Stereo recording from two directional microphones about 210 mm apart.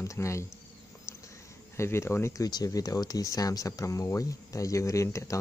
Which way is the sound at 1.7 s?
15° left (ahead or behind).